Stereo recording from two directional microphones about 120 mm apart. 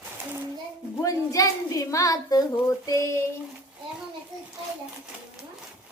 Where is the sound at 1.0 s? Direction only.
30° left (ahead or behind).